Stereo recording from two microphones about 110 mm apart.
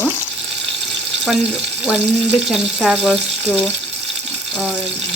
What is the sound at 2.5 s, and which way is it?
Speech, centre (ahead or behind).